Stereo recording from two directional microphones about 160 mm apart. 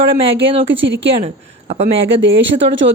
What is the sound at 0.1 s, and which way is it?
Speech, 35° right (ahead or behind).